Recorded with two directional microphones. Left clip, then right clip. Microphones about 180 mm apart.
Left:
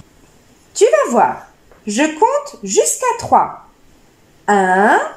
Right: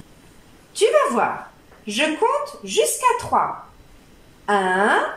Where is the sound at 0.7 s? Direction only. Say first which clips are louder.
Left 6 dB; 45° left (ahead or behind).